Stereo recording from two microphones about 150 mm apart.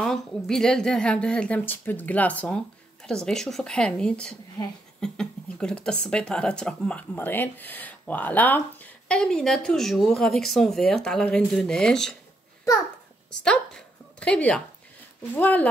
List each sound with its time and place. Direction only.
0.0 s speech: 5° left (ahead or behind)
13.4 s speech: 5° left (ahead or behind)